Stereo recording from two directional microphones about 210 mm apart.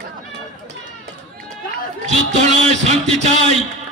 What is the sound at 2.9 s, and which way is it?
Speech, 30° right (ahead or behind).